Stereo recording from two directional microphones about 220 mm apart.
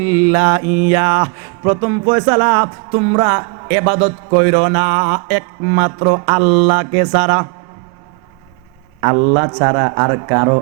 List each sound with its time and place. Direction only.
0.0 s music: 10° right (ahead or behind)
9.2 s speech: 25° right (ahead or behind)